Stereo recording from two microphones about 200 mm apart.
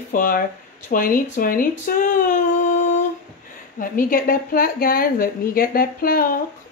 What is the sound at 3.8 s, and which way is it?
A woman's voice, 45° left (ahead or behind).